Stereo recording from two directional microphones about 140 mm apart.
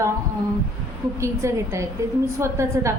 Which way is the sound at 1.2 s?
20° right (ahead or behind).